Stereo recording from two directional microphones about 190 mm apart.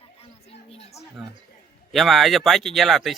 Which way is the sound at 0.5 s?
30° left (ahead or behind).